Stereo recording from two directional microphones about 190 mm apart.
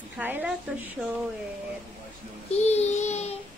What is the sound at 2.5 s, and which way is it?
Child singing, 35° left (ahead or behind).